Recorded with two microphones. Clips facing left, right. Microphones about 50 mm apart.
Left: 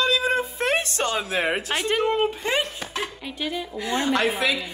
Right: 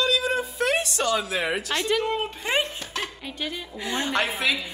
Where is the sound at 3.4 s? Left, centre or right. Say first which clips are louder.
Left 4 dB; centre.